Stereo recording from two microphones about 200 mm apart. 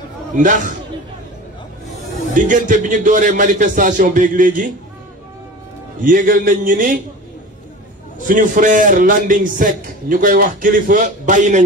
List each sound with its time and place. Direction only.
0.4 s a man's voice: 40° right (ahead or behind)
2.3 s a man's voice: 40° right (ahead or behind)
6.0 s a man's voice: 45° right (ahead or behind)
8.3 s a man's voice: 40° right (ahead or behind)